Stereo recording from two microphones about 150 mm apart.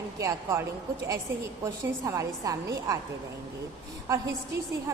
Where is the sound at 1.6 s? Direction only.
20° right (ahead or behind).